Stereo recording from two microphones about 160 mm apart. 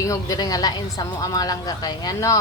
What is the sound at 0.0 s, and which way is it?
A woman's voice, 20° left (ahead or behind).